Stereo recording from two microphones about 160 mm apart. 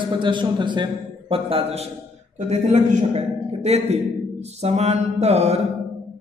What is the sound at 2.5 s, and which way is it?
A man's voice, 50° right (ahead or behind).